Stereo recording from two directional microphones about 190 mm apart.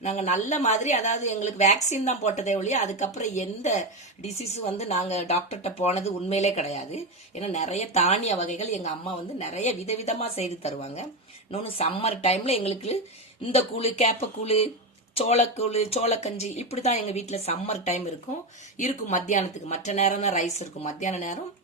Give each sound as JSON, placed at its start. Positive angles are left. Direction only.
{"t": 0.0, "sound": "a woman's voice", "side_deg": 35}